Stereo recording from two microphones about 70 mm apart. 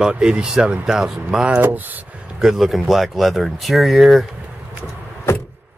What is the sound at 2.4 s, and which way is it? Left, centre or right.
Speech, centre.